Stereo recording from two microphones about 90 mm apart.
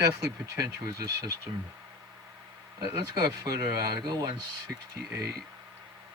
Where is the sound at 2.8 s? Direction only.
50° right (ahead or behind).